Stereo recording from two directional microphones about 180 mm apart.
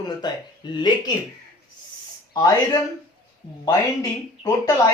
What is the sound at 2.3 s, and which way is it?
Speech, 20° left (ahead or behind).